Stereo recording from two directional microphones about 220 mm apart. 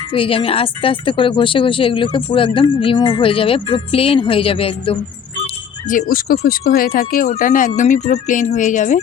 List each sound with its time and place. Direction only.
0.1 s a woman's voice: 25° left (ahead or behind)
5.9 s speech: 40° left (ahead or behind)